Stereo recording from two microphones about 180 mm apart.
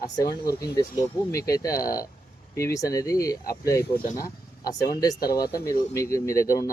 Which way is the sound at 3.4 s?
55° left (ahead or behind).